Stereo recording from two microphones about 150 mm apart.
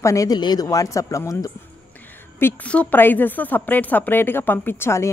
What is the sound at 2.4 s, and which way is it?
Speech, 10° left (ahead or behind).